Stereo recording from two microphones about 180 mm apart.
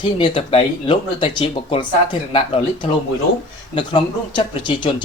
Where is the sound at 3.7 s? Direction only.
25° left (ahead or behind).